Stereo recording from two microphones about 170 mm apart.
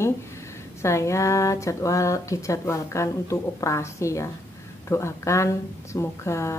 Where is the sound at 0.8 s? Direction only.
15° left (ahead or behind).